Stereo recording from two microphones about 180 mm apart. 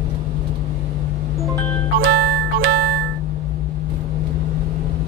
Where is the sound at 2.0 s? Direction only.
55° right (ahead or behind).